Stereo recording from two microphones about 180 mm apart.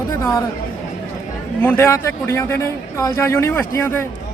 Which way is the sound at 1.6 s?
15° left (ahead or behind).